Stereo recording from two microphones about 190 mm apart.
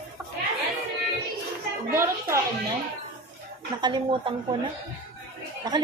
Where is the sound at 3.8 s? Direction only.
25° right (ahead or behind).